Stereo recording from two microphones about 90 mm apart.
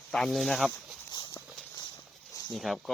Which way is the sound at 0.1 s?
Centre (ahead or behind).